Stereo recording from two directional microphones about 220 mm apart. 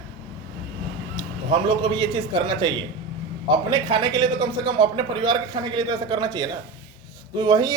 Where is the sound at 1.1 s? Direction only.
20° right (ahead or behind).